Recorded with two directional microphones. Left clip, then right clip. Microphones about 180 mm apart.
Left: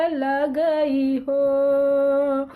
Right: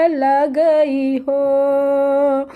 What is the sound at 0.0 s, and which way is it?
Speech, 35° right (ahead or behind).